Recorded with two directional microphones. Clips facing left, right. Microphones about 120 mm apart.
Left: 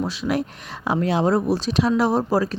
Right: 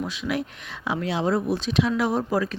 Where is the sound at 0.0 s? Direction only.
35° left (ahead or behind).